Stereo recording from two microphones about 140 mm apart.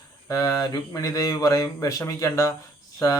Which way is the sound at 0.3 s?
25° left (ahead or behind).